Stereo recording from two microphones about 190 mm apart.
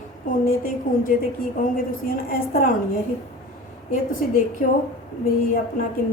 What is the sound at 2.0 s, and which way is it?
Speech, 50° left (ahead or behind).